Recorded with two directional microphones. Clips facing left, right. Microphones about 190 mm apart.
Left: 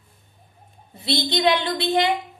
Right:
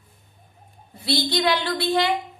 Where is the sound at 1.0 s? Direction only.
20° left (ahead or behind).